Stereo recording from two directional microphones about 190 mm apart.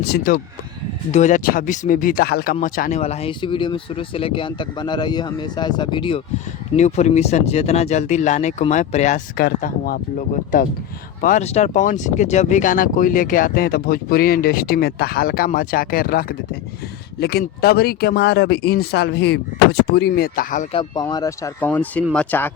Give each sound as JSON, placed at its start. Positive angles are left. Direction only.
{"t": 0.0, "sound": "speech", "side_deg": 55}
{"t": 3.0, "sound": "speech", "side_deg": 30}
{"t": 6.7, "sound": "speech", "side_deg": 35}
{"t": 9.4, "sound": "speech", "side_deg": 45}
{"t": 20.7, "sound": "speech", "side_deg": 20}